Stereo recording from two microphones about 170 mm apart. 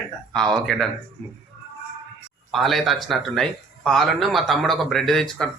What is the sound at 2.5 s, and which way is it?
Speech, centre (ahead or behind).